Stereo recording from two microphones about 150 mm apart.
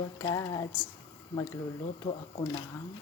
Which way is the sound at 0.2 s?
25° left (ahead or behind).